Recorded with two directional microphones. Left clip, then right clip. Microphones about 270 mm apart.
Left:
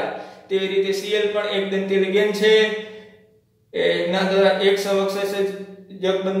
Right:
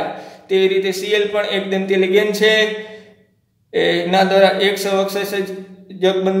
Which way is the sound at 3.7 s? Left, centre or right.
Right.